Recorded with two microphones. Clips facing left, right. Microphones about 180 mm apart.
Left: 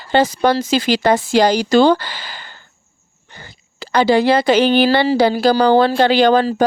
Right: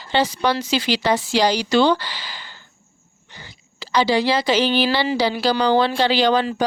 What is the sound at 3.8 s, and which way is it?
Speech, 55° left (ahead or behind).